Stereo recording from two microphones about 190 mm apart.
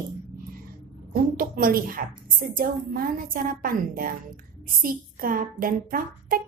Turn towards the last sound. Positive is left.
turn(degrees=-50)  # may be behind; listen again after turning